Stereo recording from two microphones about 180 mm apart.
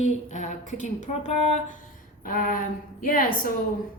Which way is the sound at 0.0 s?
40° left (ahead or behind).